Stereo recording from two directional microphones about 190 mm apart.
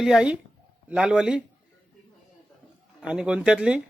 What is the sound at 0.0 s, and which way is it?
Speech, 5° right (ahead or behind).